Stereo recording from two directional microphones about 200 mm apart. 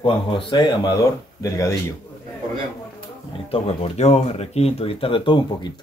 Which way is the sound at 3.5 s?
30° left (ahead or behind).